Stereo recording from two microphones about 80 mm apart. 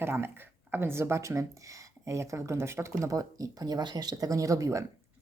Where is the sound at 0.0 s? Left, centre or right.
Right.